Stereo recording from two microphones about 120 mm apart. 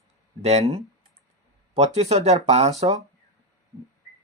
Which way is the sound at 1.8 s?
60° right (ahead or behind).